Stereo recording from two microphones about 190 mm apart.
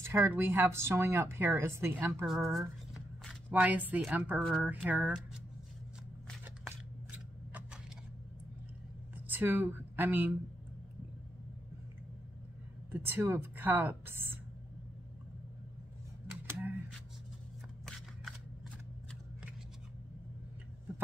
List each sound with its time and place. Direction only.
0.0 s speech: 15° right (ahead or behind)
2.2 s speech: centre (ahead or behind)
7.1 s a sound: 5° right (ahead or behind)
9.3 s speech: 10° right (ahead or behind)
12.9 s speech: 10° right (ahead or behind)
16.5 s a sound: centre (ahead or behind)
17.8 s shuffling cards: 5° left (ahead or behind)